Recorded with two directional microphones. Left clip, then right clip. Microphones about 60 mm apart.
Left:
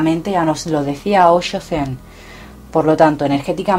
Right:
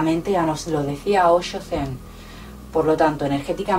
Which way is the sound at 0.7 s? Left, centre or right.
Left.